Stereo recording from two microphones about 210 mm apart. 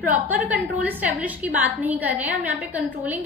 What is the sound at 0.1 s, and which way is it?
A woman's voice, 5° right (ahead or behind).